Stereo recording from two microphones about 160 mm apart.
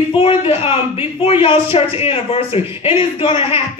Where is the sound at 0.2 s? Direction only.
35° left (ahead or behind).